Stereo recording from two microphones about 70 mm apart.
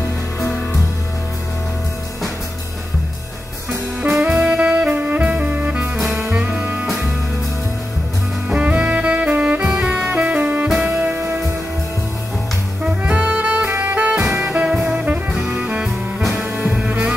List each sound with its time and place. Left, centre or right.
4.0 s jazz: centre
4.3 s saxophone: centre
6.3 s music: right
8.5 s music: centre
10.2 s saxophone: right
11.0 s music: right
13.1 s music: centre
13.7 s saxophone: right
14.5 s music: centre
15.4 s music: centre
16.5 s music: right